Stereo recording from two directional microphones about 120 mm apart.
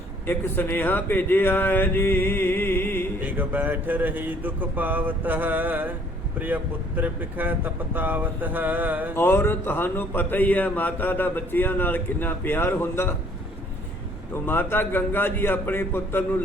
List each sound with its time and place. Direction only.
0.3 s a man's voice: 15° left (ahead or behind)
3.2 s speech: 15° right (ahead or behind)
9.1 s a man's voice: 20° left (ahead or behind)
14.4 s a man's voice: 15° left (ahead or behind)